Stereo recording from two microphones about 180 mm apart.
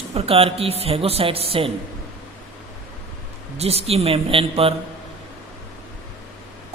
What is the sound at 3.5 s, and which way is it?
A woman's voice, 35° right (ahead or behind).